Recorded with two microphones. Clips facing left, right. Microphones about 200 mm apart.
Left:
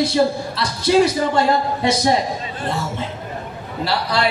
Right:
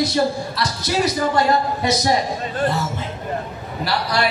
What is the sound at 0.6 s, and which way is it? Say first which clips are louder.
Speech: left 8 dB; 30° left (ahead or behind).